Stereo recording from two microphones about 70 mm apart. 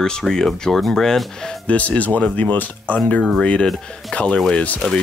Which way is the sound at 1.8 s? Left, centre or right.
Left.